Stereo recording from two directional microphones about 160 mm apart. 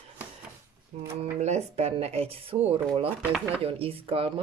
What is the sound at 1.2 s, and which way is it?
Speech, 45° right (ahead or behind).